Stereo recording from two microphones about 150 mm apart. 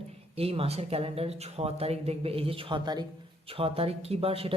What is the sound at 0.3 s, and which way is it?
Speech, 40° right (ahead or behind).